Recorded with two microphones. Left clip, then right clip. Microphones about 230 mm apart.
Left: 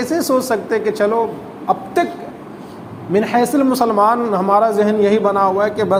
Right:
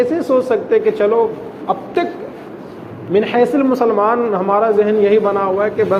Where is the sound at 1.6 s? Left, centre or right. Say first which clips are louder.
Left 1 dB; left.